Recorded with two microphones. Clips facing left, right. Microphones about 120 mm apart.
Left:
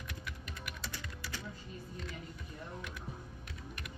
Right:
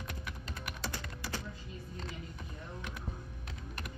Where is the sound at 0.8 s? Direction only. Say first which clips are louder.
Right 6 dB; 35° right (ahead or behind).